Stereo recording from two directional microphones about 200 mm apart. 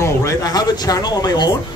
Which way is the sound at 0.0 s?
15° left (ahead or behind).